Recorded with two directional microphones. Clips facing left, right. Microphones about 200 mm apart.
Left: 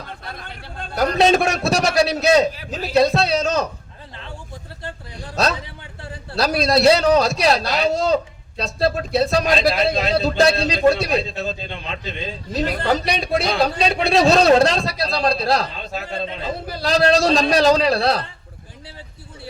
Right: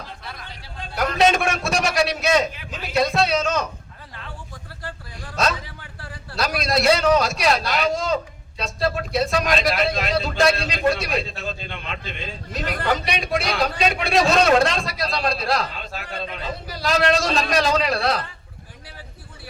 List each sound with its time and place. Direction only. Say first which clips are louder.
0.9 s a man's voice: left 3 dB; 35° left (ahead or behind)
4.8 s a man's voice: left 2 dB; 25° left (ahead or behind)